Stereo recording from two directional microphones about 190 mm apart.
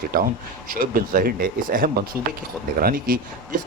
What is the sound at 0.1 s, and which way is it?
Speech, 50° right (ahead or behind).